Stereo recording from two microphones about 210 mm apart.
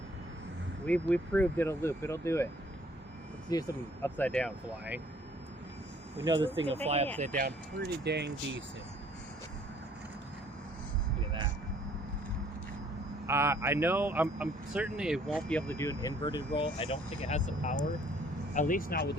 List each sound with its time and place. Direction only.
0.9 s speech: 5° left (ahead or behind)
3.5 s speech: 15° left (ahead or behind)
6.2 s speech: 20° right (ahead or behind)
7.3 s speech: 50° right (ahead or behind)
13.2 s speech: 10° right (ahead or behind); by 19.1 s 45° left (ahead or behind)